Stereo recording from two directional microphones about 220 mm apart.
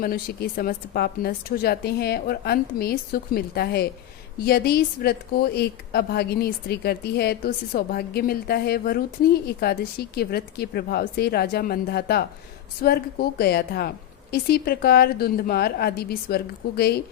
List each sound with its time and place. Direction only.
0.0 s a woman's voice: 45° left (ahead or behind)